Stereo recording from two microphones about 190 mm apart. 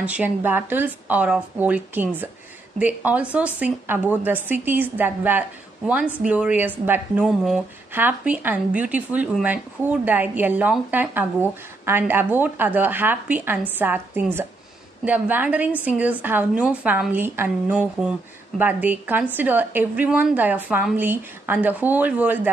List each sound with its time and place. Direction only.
0.0 s speech: 10° right (ahead or behind)